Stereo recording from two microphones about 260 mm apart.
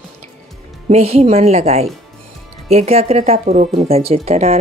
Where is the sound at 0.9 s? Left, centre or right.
Right.